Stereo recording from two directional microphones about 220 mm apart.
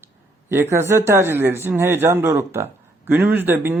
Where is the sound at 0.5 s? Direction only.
10° right (ahead or behind).